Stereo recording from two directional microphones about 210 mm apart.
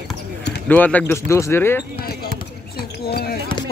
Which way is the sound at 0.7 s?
5° left (ahead or behind).